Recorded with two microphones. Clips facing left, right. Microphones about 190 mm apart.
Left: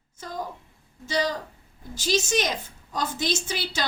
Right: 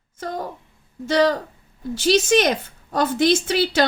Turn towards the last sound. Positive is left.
turn(degrees=-60)  # may be behind; listen again after turning